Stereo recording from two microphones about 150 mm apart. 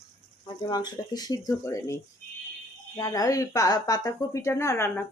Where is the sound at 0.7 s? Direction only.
25° left (ahead or behind).